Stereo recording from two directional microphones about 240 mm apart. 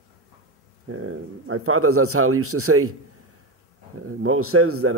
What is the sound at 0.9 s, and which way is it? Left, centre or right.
A man's voice, right.